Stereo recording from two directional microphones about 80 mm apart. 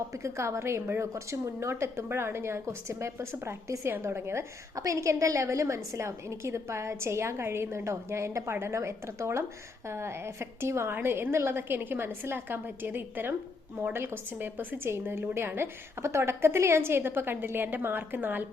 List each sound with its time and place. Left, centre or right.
0.1 s a woman's voice: right
4.7 s a woman's voice: right